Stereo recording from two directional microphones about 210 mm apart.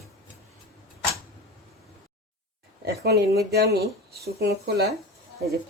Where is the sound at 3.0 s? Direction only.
50° right (ahead or behind).